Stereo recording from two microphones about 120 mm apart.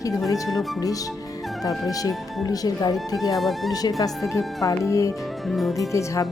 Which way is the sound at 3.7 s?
30° left (ahead or behind).